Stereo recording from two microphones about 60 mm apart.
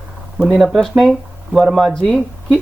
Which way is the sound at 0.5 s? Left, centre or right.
Centre.